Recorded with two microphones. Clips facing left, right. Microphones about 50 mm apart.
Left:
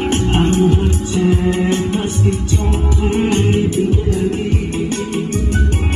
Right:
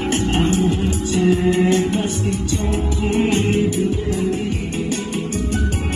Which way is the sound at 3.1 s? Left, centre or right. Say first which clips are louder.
Left 2 dB; left.